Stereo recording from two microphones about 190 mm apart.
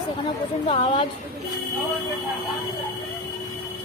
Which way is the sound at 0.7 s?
30° left (ahead or behind).